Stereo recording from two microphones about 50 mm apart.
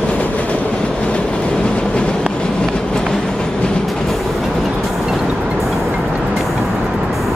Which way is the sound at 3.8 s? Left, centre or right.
Centre.